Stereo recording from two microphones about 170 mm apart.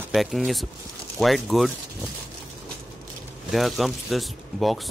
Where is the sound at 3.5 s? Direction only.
Centre (ahead or behind).